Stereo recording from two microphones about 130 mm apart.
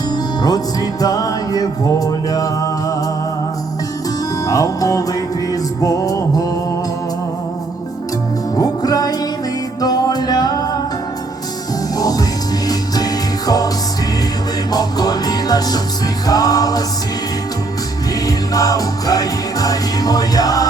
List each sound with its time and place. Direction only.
0.4 s music: 30° left (ahead or behind)
4.4 s music: 25° left (ahead or behind)
8.5 s music: 30° left (ahead or behind)
11.9 s music: 30° left (ahead or behind)
14.7 s music: 30° left (ahead or behind)
18.3 s music: 30° left (ahead or behind)